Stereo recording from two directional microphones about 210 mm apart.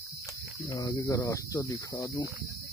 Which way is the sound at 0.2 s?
15° left (ahead or behind).